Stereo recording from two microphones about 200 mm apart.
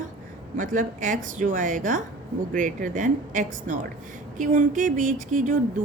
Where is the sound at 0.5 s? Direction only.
40° right (ahead or behind).